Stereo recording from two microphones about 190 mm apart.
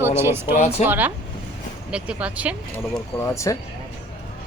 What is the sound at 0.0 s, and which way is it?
Speech, 15° right (ahead or behind).